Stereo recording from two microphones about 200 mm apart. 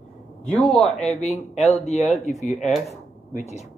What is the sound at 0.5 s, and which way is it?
Speech, 10° left (ahead or behind).